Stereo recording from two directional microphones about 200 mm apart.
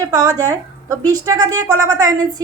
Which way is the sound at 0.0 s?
20° right (ahead or behind).